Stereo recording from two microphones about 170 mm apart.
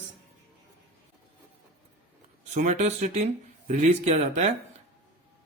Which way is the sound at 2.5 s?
45° right (ahead or behind).